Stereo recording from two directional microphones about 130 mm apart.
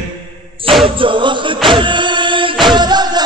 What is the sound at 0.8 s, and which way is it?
Music, 40° right (ahead or behind).